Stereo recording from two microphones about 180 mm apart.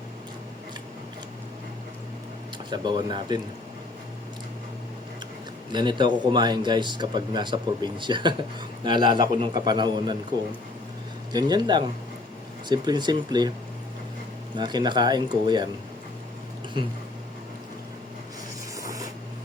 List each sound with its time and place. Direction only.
2.6 s speech: 25° right (ahead or behind)
5.7 s speech: 25° right (ahead or behind)
11.3 s speech: 20° right (ahead or behind)
14.5 s speech: 25° right (ahead or behind)
18.8 s a sound: 20° right (ahead or behind)